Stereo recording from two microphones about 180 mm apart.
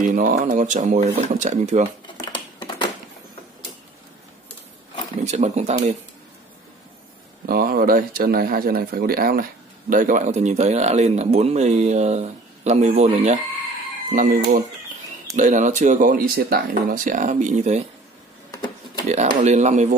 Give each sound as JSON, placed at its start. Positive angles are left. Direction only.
{"t": 0.0, "sound": "speech", "side_deg": -45}
{"t": 2.0, "sound": "a sound", "side_deg": 25}
{"t": 5.2, "sound": "speech", "side_deg": -40}
{"t": 7.4, "sound": "speech", "side_deg": -55}
{"t": 14.1, "sound": "speech", "side_deg": -50}
{"t": 19.0, "sound": "speech", "side_deg": -40}